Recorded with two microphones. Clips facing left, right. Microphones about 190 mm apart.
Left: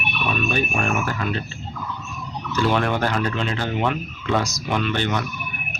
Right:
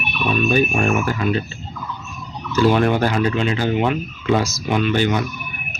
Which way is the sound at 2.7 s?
10° right (ahead or behind).